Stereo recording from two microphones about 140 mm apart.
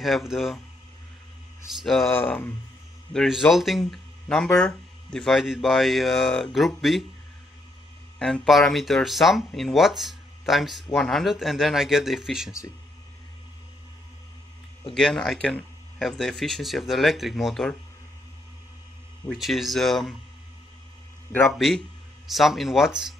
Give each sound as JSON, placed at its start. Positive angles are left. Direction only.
{"t": 0.0, "sound": "speech", "side_deg": 0}
{"t": 1.8, "sound": "speech", "side_deg": 0}
{"t": 2.0, "sound": "speech", "side_deg": 15}
{"t": 3.1, "sound": "speech", "side_deg": 0}
{"t": 8.2, "sound": "speech", "side_deg": 0}
{"t": 15.0, "sound": "speech", "side_deg": 5}
{"t": 19.2, "sound": "speech", "side_deg": 0}
{"t": 21.5, "sound": "speech", "side_deg": 0}